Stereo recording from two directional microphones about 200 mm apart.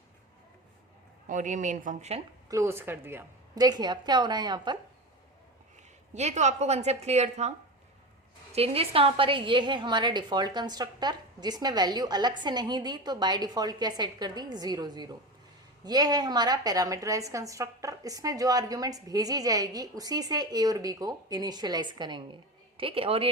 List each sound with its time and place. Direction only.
1.3 s a woman's voice: 40° right (ahead or behind)
2.5 s a woman's voice: 15° right (ahead or behind)
6.1 s a woman's voice: 35° right (ahead or behind)
8.5 s a woman's voice: 30° right (ahead or behind)